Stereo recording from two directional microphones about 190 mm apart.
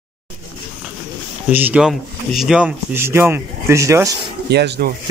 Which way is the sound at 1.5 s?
10° right (ahead or behind).